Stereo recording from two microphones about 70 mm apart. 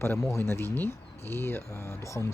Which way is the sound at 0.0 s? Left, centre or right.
Left.